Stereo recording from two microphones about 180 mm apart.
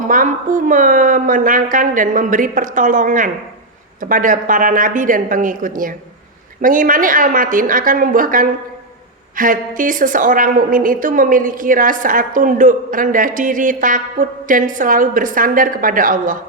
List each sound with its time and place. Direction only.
0.1 s a woman's voice: 45° right (ahead or behind)